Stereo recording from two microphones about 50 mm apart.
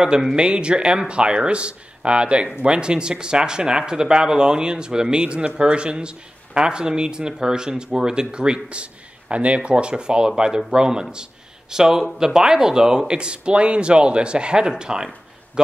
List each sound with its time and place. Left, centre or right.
0.0 s speech: centre